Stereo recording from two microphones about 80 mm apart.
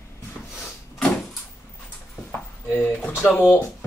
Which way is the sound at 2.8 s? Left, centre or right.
Left.